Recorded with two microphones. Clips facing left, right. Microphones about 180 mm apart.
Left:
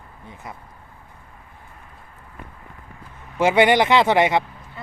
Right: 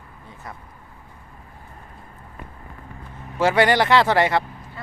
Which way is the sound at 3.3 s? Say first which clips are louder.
Left 2 dB; 20° left (ahead or behind).